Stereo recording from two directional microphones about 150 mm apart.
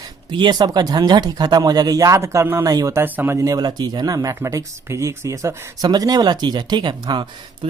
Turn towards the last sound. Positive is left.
turn(degrees=-30)  # may be behind; listen again after turning